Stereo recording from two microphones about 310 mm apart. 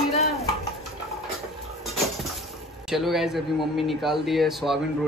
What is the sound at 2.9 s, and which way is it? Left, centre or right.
Speech, centre.